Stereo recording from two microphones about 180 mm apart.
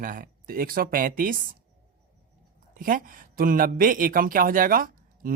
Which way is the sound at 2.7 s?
50° right (ahead or behind).